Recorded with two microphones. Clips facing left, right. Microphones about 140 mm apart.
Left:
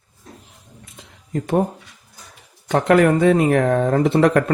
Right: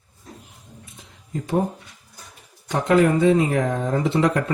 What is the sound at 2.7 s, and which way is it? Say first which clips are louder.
Speech: left 3 dB; 65° left (ahead or behind).